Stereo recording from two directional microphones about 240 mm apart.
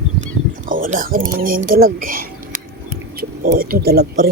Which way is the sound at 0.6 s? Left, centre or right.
Right.